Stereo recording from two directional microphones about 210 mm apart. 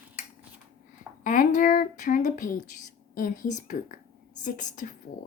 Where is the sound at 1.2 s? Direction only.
40° left (ahead or behind).